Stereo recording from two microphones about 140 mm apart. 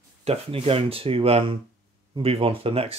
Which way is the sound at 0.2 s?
45° right (ahead or behind).